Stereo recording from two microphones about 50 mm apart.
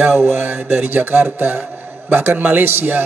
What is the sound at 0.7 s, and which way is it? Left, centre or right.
A man's voice, right.